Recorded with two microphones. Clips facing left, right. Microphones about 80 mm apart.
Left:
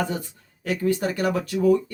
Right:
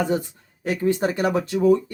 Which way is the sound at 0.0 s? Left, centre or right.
Right.